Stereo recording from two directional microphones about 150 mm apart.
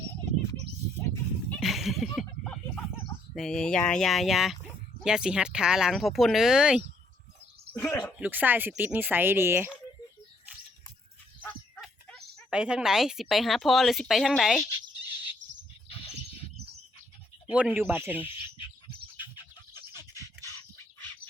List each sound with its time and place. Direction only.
0.9 s a sound: 10° left (ahead or behind)
1.6 s a sound: centre (ahead or behind)
3.3 s a woman's voice: 5° left (ahead or behind)
7.7 s bird: 15° left (ahead or behind)
8.2 s speech: 10° right (ahead or behind)
12.5 s a woman's voice: 5° right (ahead or behind)
15.9 s a sound: 40° left (ahead or behind)
17.5 s speech: 10° right (ahead or behind)
19.2 s bird: 30° left (ahead or behind)